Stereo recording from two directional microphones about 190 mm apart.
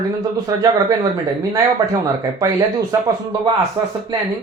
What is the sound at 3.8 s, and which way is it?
Speech, 25° right (ahead or behind).